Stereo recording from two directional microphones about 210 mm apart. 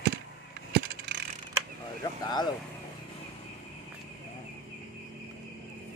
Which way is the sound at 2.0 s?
20° left (ahead or behind).